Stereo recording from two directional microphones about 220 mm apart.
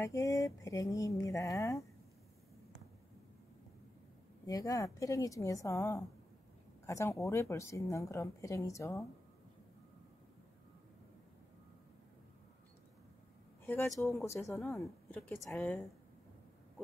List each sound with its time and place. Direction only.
0.0 s speech: 15° left (ahead or behind)
4.5 s speech: 15° left (ahead or behind)
13.7 s a woman's voice: 10° left (ahead or behind)
15.1 s speech: centre (ahead or behind)